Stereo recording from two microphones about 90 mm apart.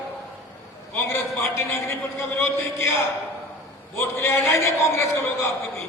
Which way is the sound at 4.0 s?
25° left (ahead or behind).